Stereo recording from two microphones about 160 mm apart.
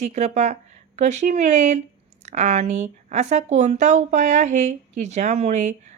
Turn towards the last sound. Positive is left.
turn(degrees=-45)  # may be behind; listen again after turning